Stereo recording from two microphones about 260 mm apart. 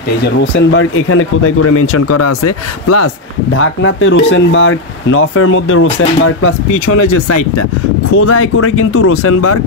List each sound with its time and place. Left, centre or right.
0.2 s speech: left
3.5 s speech: left
8.1 s speech: left